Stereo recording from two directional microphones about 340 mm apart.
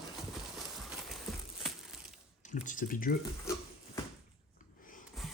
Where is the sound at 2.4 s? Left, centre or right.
Left.